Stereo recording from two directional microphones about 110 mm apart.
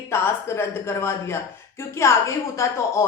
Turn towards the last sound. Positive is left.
turn(degrees=25)  # may be behind; listen again after turning